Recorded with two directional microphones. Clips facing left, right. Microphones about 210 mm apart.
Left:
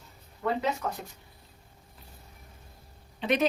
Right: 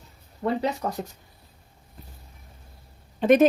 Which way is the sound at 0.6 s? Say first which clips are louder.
Right 4 dB; 35° right (ahead or behind).